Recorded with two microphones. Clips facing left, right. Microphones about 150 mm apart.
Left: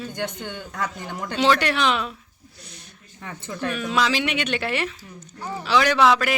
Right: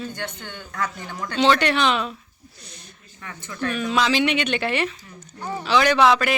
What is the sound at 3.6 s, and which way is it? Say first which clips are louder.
A man's voice: right 1 dB; centre (ahead or behind).